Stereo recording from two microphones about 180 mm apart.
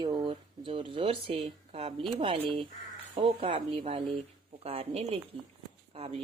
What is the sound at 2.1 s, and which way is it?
Speech, 30° right (ahead or behind).